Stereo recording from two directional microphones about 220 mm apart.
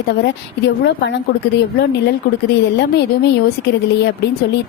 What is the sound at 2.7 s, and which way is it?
Speech, 50° left (ahead or behind).